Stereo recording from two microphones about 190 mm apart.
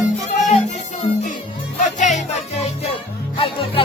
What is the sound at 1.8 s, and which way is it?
Music, 40° left (ahead or behind).